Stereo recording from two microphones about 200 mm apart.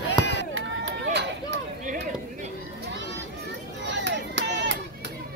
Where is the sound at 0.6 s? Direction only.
75° right (ahead or behind).